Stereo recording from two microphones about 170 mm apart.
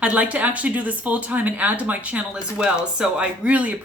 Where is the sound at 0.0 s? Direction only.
10° right (ahead or behind).